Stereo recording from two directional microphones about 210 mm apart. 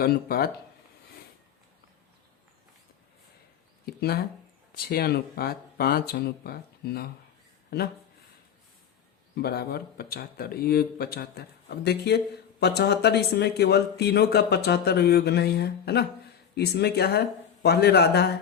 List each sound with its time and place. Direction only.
0.0 s speech: 45° left (ahead or behind)
3.8 s speech: 45° left (ahead or behind)
9.3 s speech: 50° left (ahead or behind)